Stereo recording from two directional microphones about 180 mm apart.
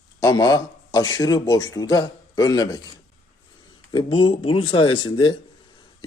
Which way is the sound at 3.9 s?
30° left (ahead or behind).